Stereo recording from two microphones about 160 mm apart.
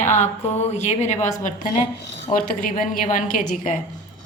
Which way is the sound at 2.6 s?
55° left (ahead or behind).